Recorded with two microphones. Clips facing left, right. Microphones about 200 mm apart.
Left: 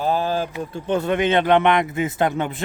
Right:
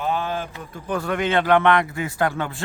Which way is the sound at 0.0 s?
35° left (ahead or behind).